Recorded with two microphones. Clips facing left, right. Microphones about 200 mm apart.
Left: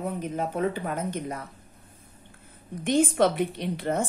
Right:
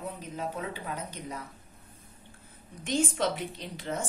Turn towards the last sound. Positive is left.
turn(degrees=55)  # may be behind; listen again after turning